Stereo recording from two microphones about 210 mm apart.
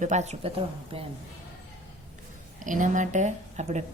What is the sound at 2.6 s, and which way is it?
A woman's voice, 40° right (ahead or behind).